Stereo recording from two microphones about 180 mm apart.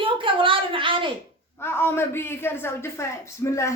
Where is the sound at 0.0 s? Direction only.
30° right (ahead or behind).